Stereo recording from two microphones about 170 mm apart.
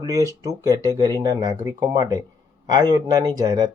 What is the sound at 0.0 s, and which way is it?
Speech, 20° right (ahead or behind).